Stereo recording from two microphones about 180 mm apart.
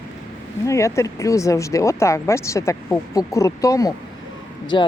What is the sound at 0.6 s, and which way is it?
Speech, 15° left (ahead or behind).